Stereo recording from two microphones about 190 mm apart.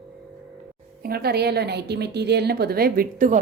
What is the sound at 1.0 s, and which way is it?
A woman's voice, 55° right (ahead or behind).